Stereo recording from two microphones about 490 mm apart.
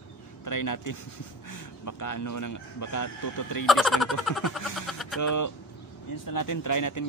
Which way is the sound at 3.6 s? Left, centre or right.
Centre.